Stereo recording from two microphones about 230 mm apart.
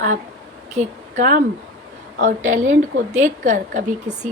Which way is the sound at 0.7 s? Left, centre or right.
Right.